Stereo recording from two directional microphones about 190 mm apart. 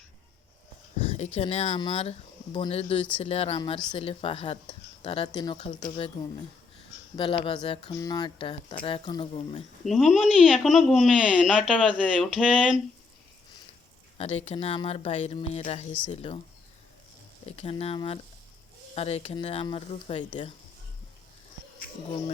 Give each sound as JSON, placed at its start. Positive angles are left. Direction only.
{"t": 1.0, "sound": "speech", "side_deg": 35}
{"t": 7.2, "sound": "speech", "side_deg": 25}
{"t": 9.8, "sound": "speech", "side_deg": 0}
{"t": 14.2, "sound": "speech", "side_deg": 35}
{"t": 17.4, "sound": "speech", "side_deg": 30}